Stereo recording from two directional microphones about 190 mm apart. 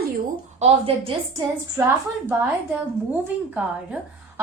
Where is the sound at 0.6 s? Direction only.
30° right (ahead or behind).